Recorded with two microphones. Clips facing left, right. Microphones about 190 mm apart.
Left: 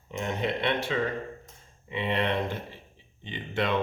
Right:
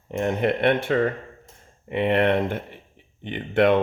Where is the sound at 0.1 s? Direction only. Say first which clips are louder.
Right 7 dB; 55° right (ahead or behind).